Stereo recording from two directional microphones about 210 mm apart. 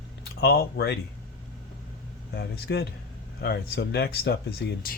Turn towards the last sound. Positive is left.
turn(degrees=50)  # may be behind; listen again after turning